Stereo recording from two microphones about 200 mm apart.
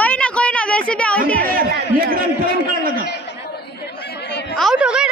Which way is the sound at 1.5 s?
45° right (ahead or behind).